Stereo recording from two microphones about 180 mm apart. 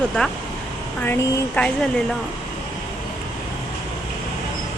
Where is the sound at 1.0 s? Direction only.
15° left (ahead or behind).